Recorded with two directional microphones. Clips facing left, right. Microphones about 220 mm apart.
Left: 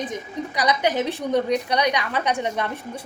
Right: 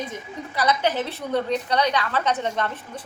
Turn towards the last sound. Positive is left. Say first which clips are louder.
# left 1 dB
turn(degrees=10)  # may be behind; listen again after turning